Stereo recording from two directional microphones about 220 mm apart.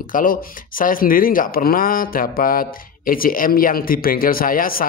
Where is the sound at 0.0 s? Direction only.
40° left (ahead or behind).